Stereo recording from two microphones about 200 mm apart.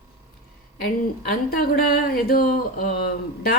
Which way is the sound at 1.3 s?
50° left (ahead or behind).